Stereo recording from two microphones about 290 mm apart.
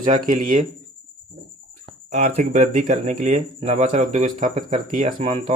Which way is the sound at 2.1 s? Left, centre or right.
Right.